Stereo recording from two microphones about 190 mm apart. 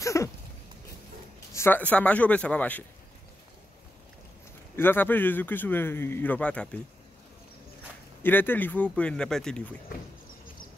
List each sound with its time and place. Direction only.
0.0 s a sound: 15° left (ahead or behind)
1.5 s speech: 10° left (ahead or behind)
4.7 s speech: 10° left (ahead or behind)
8.2 s speech: 10° left (ahead or behind)